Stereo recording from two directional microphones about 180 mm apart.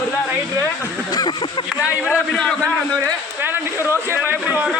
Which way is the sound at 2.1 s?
5° left (ahead or behind).